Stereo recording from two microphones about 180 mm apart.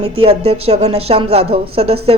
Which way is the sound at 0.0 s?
30° right (ahead or behind).